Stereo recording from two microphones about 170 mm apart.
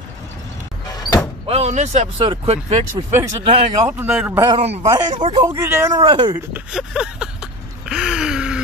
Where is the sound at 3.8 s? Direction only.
10° right (ahead or behind).